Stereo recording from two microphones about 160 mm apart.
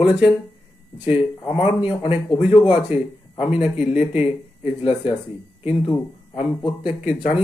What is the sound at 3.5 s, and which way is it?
Speech, 5° right (ahead or behind).